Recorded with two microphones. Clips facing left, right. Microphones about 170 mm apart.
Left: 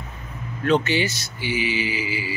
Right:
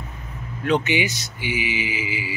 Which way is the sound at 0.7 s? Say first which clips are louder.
Left 1 dB; 15° right (ahead or behind).